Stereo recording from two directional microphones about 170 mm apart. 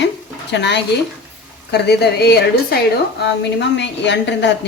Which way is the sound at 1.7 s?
75° left (ahead or behind).